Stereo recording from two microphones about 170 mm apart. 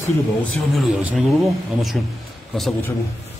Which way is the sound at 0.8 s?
Centre (ahead or behind).